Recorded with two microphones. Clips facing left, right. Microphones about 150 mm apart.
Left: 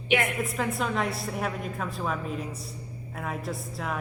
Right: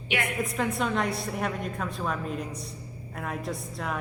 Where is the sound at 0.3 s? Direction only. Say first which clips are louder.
Right 1 dB; centre (ahead or behind).